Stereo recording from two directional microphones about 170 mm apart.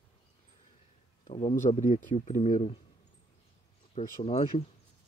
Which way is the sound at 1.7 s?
45° left (ahead or behind).